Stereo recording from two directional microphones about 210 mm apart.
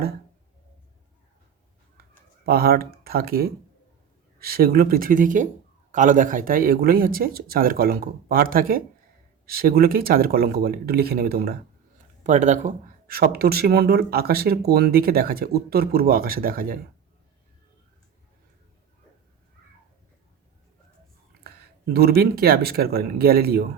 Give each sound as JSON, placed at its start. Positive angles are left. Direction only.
{"t": 2.5, "sound": "speech", "side_deg": -45}
{"t": 12.2, "sound": "speech", "side_deg": -35}
{"t": 22.2, "sound": "speech", "side_deg": -45}